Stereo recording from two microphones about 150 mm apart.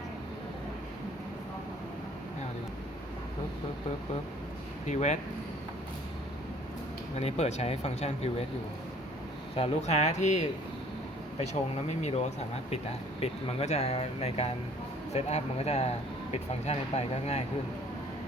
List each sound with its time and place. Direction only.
4.9 s speech: 50° left (ahead or behind)
7.2 s speech: 45° left (ahead or behind)
9.6 s speech: 45° left (ahead or behind)